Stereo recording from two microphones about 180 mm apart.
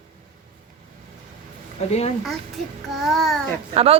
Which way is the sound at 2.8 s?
Centre (ahead or behind).